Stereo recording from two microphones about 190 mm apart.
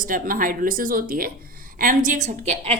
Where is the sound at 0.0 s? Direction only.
45° right (ahead or behind).